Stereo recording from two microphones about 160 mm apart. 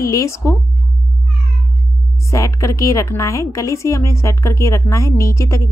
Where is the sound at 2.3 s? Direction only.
20° left (ahead or behind).